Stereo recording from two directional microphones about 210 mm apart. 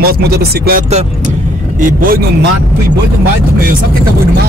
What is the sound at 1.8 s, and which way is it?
Speech, 45° right (ahead or behind).